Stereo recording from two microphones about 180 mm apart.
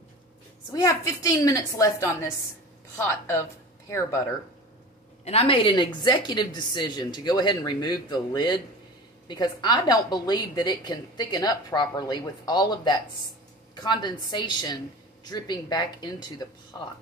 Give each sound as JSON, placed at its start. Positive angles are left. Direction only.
{"t": 0.7, "sound": "a woman's voice", "side_deg": 20}
{"t": 5.2, "sound": "a woman's voice", "side_deg": 30}